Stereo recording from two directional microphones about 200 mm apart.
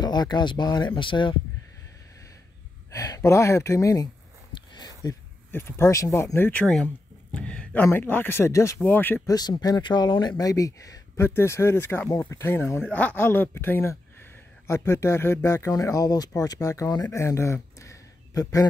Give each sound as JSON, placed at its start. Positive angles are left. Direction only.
{"t": 0.0, "sound": "speech", "side_deg": 20}
{"t": 2.9, "sound": "speech", "side_deg": 15}